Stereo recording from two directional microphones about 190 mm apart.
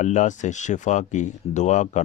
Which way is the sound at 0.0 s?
40° left (ahead or behind).